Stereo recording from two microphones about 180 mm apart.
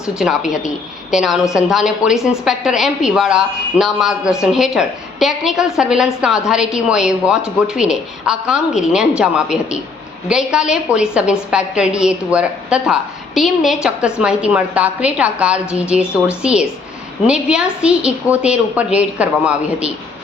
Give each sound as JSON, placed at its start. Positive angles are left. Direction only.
{"t": 0.2, "sound": "a woman's voice", "side_deg": -5}